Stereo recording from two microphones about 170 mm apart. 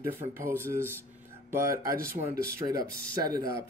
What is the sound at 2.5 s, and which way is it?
Speech, 20° right (ahead or behind).